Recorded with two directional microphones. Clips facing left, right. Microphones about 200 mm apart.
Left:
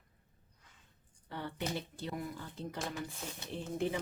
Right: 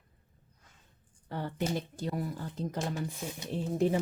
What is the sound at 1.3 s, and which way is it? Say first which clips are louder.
Speech: right 5 dB; 45° right (ahead or behind).